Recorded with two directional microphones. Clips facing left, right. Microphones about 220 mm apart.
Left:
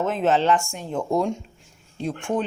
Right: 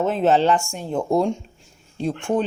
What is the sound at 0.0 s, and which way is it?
Speech, 35° right (ahead or behind).